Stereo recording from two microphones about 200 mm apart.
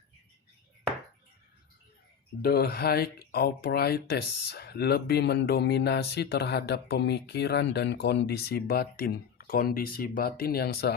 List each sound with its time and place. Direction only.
2.4 s speech: 50° left (ahead or behind)